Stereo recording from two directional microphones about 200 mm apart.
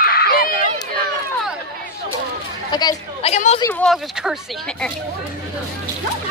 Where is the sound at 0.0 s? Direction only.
50° left (ahead or behind).